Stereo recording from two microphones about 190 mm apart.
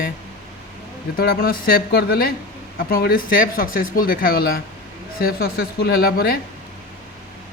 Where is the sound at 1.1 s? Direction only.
50° left (ahead or behind).